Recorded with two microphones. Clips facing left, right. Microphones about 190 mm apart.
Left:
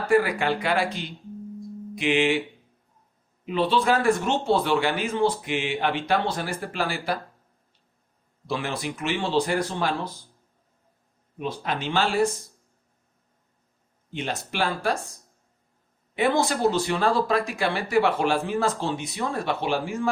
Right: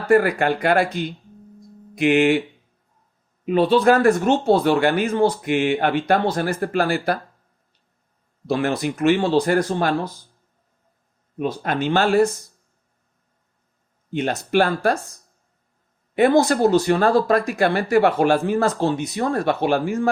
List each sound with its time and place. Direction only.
0.1 s speech: 50° right (ahead or behind)
3.4 s speech: 50° right (ahead or behind)
8.4 s speech: 50° right (ahead or behind)
11.3 s speech: 50° right (ahead or behind)
14.1 s speech: 50° right (ahead or behind)
16.1 s speech: 45° right (ahead or behind)